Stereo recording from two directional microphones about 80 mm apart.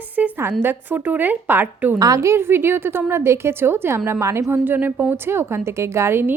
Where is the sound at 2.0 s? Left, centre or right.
Right.